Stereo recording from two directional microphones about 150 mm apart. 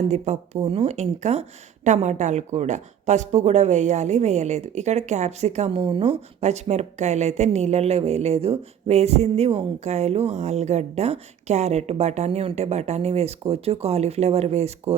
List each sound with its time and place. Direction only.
0.1 s speech: 50° right (ahead or behind)